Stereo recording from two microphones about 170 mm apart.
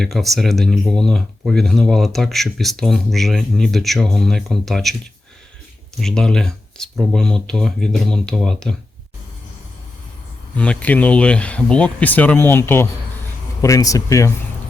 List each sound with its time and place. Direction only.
0.0 s speech: centre (ahead or behind)
6.0 s speech: 5° left (ahead or behind)
10.6 s speech: 10° left (ahead or behind)